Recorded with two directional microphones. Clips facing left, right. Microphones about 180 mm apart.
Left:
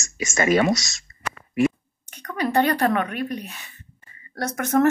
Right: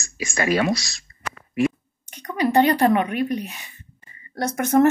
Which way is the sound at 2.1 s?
15° right (ahead or behind).